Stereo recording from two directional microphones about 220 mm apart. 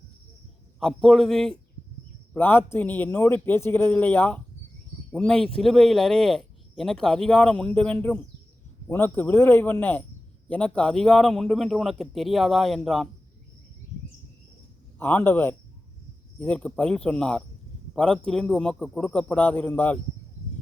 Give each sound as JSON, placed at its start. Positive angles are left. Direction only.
{"t": 0.8, "sound": "a man's voice", "side_deg": 0}
{"t": 14.9, "sound": "a man's voice", "side_deg": 10}